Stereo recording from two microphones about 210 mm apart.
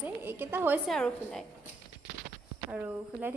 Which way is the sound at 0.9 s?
5° left (ahead or behind).